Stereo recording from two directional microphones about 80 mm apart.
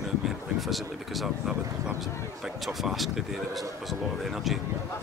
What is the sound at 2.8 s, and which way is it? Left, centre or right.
Speech, centre.